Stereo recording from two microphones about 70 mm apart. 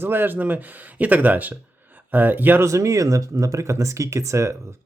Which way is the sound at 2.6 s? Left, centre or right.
Right.